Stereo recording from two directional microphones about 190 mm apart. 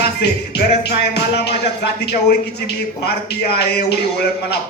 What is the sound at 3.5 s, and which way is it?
Music, 60° left (ahead or behind).